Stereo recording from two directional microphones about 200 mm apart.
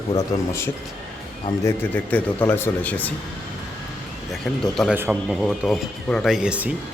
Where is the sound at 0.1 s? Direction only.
15° left (ahead or behind).